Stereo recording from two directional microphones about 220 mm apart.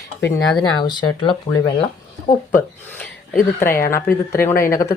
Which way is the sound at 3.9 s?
10° left (ahead or behind).